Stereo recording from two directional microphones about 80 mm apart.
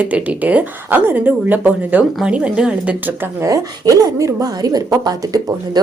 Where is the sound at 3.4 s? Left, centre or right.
Right.